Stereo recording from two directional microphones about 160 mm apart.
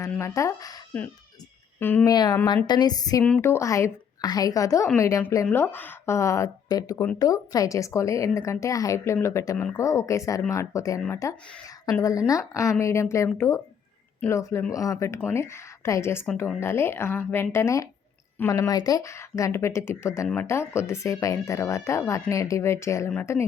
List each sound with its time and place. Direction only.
0.2 s a woman's voice: 20° left (ahead or behind)
1.8 s speech: 10° left (ahead or behind)
2.0 s a woman's voice: 25° left (ahead or behind)
3.2 s a woman's voice: 10° left (ahead or behind)